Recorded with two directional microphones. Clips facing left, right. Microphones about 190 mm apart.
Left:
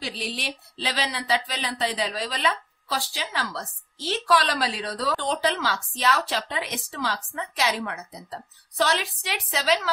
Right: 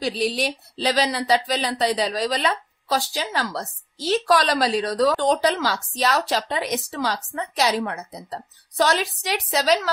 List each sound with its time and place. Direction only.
0.0 s speech: 40° right (ahead or behind)